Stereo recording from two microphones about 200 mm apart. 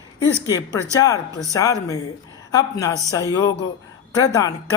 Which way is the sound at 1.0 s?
15° left (ahead or behind).